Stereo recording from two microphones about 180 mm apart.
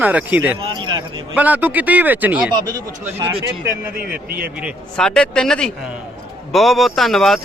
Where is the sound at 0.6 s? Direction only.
25° right (ahead or behind).